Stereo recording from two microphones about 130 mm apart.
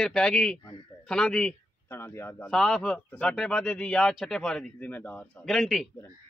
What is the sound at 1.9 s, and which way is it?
Speech, 20° left (ahead or behind).